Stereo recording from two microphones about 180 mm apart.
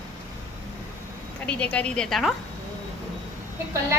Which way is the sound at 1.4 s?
5° left (ahead or behind).